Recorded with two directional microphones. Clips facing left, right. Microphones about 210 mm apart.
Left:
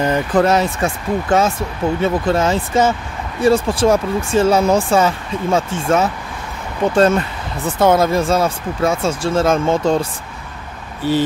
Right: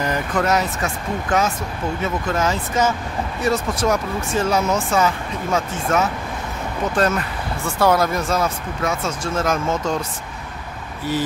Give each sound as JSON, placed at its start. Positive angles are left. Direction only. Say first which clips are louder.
{"t": 0.0, "sound": "speech", "louder": "left 6 dB", "side_deg": 30}
{"t": 11.1, "sound": "speech", "louder": "left 6 dB", "side_deg": 25}